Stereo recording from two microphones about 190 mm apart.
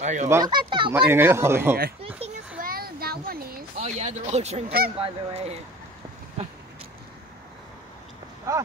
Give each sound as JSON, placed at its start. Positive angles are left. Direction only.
{"t": 0.0, "sound": "speech", "side_deg": -40}
{"t": 0.3, "sound": "speech", "side_deg": -20}
{"t": 0.9, "sound": "speech", "side_deg": -10}
{"t": 2.0, "sound": "children playing", "side_deg": -30}
{"t": 2.6, "sound": "a sound", "side_deg": -50}
{"t": 3.8, "sound": "speech", "side_deg": -35}
{"t": 8.5, "sound": "speech", "side_deg": -15}